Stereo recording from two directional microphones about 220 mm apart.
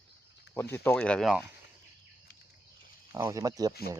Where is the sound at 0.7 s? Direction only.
10° left (ahead or behind).